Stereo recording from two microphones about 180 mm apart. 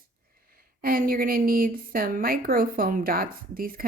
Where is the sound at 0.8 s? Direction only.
55° right (ahead or behind).